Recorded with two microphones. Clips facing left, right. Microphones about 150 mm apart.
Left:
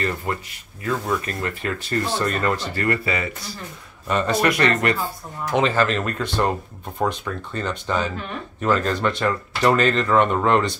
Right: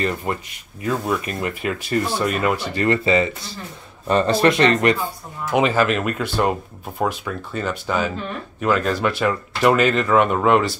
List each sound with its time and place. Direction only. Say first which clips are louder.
0.0 s speech: right 2 dB; 20° right (ahead or behind)
5.5 s speech: right 2 dB; 10° right (ahead or behind)